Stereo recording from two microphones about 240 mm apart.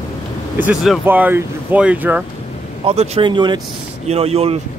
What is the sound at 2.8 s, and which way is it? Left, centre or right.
Speech, right.